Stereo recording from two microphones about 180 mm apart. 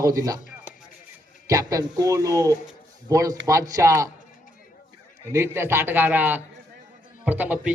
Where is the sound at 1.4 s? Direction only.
20° right (ahead or behind).